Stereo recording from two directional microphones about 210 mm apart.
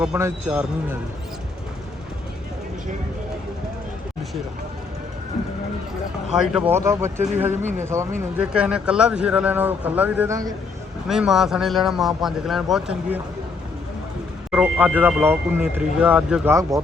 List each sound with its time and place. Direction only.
0.0 s speech: 10° right (ahead or behind)
6.3 s speech: 5° right (ahead or behind)
11.1 s a man's voice: centre (ahead or behind)
14.5 s speech: 5° right (ahead or behind)